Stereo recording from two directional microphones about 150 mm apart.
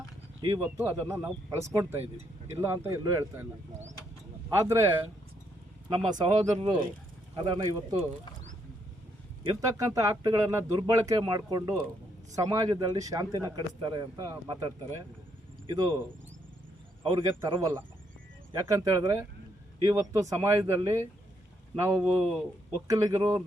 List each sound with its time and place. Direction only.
0.8 s speech: 15° right (ahead or behind)
4.4 s speech: 20° right (ahead or behind)
6.1 s a man's voice: 30° right (ahead or behind)
9.4 s a man's voice: 25° right (ahead or behind)
17.0 s a man's voice: 35° right (ahead or behind)
18.5 s speech: 20° right (ahead or behind)